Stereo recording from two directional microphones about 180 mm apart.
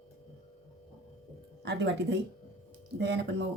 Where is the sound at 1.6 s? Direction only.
70° right (ahead or behind).